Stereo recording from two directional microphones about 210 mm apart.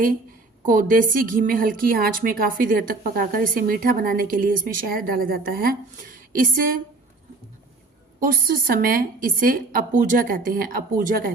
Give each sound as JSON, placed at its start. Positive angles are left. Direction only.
{"t": 0.6, "sound": "a woman's voice", "side_deg": -40}
{"t": 8.2, "sound": "a woman's voice", "side_deg": -45}